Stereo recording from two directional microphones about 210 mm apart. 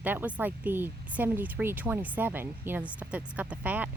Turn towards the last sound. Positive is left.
turn(degrees=-5)  # may be behind; listen again after turning